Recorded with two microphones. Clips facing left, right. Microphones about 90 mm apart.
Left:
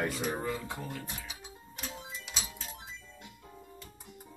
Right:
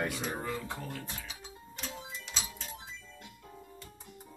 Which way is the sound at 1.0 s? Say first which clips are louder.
Left 1 dB; 15° left (ahead or behind).